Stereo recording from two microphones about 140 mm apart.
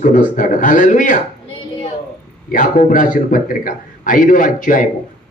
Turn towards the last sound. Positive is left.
turn(degrees=75)  # may be behind; listen again after turning